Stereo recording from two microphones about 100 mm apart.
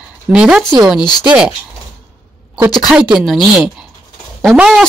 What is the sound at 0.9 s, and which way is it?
Speech, 45° left (ahead or behind).